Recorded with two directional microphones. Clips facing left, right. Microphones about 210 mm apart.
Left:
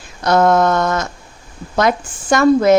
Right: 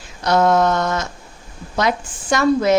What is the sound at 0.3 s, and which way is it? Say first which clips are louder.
Speech: left 2 dB; 50° left (ahead or behind).